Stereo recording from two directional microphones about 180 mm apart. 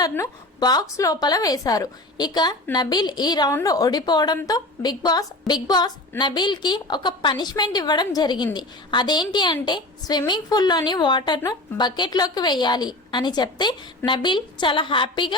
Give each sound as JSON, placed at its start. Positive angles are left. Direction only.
{"t": 0.0, "sound": "a woman's voice", "side_deg": 20}